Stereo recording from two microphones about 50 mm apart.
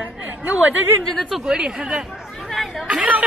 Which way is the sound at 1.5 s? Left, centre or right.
Centre.